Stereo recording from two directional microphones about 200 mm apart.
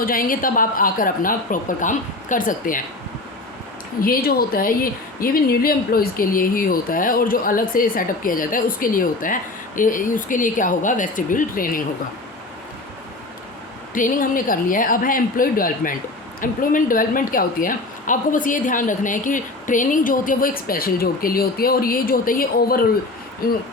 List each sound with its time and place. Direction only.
0.0 s speech: 45° left (ahead or behind)
4.0 s speech: 45° left (ahead or behind)
13.9 s speech: 45° left (ahead or behind)